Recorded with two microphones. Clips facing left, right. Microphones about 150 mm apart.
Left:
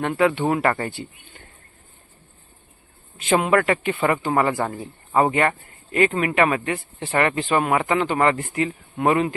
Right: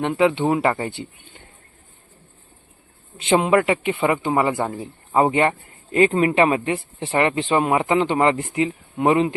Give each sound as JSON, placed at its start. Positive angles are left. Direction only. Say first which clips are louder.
{"t": 0.0, "sound": "speech", "louder": "right 1 dB", "side_deg": -20}
{"t": 3.2, "sound": "speech", "louder": "right 2 dB", "side_deg": -25}